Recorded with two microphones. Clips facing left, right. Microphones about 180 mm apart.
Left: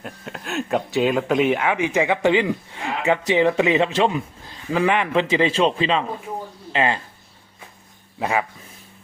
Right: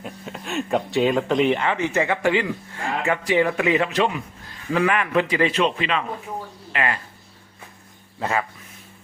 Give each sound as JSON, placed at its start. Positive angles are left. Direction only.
{"t": 0.0, "sound": "speech", "side_deg": 0}
{"t": 8.2, "sound": "speech", "side_deg": 15}